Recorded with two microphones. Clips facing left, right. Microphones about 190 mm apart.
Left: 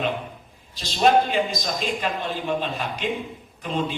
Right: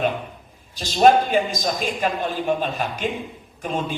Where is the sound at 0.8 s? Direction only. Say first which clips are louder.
Right 3 dB; 45° right (ahead or behind).